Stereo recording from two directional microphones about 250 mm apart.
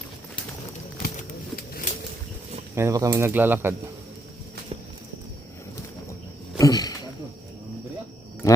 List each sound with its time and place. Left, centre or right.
1.0 s a sound: left
2.7 s speech: centre
6.6 s snake: centre